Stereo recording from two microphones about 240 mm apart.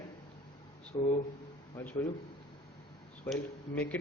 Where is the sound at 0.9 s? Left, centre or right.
Centre.